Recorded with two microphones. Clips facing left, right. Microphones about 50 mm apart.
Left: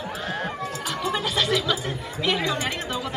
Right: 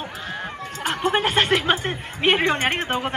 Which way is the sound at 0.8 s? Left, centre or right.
Right.